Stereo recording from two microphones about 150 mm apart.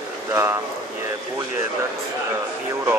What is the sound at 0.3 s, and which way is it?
Speech, 20° right (ahead or behind).